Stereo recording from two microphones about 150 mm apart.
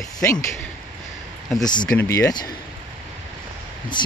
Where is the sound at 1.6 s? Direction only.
30° left (ahead or behind).